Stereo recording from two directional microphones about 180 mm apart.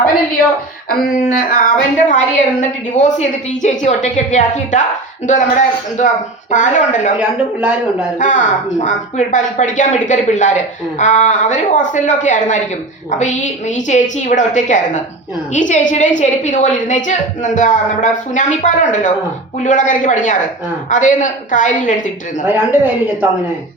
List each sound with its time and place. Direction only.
1.0 s a woman's voice: 50° left (ahead or behind)
7.2 s speech: 5° right (ahead or behind)
8.2 s a woman's voice: 45° left (ahead or behind)
22.4 s speech: 10° right (ahead or behind)